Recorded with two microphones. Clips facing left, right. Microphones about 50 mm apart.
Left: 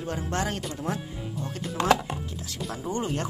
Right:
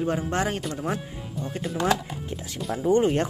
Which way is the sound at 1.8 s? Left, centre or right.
Left.